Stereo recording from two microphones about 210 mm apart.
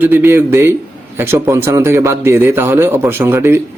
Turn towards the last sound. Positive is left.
turn(degrees=-10)  # may be behind; listen again after turning